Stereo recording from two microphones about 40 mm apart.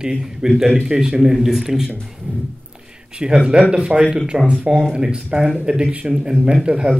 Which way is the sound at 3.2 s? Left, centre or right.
Right.